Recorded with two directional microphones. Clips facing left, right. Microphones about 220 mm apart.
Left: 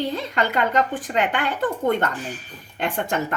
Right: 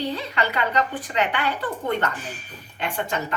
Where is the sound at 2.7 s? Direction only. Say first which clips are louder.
Left 3 dB; 50° left (ahead or behind).